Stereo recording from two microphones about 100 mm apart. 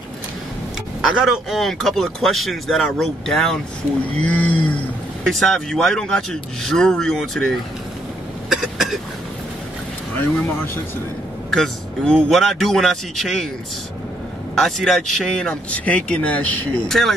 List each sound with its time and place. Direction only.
1.0 s speech: 5° right (ahead or behind); by 4.7 s 15° left (ahead or behind)
5.2 s speech: 5° left (ahead or behind)
8.5 s a sound: 5° right (ahead or behind)
10.1 s speech: 20° left (ahead or behind)
11.5 s speech: 5° left (ahead or behind)
14.6 s speech: centre (ahead or behind)